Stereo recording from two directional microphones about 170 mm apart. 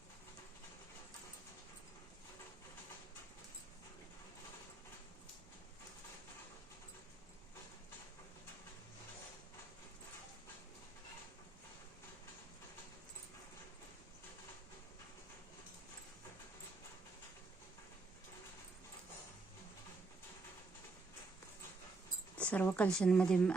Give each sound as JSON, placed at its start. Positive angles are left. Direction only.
{"t": 22.4, "sound": "speech", "side_deg": 10}